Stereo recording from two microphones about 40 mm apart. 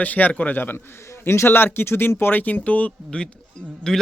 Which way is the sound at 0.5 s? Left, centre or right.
Left.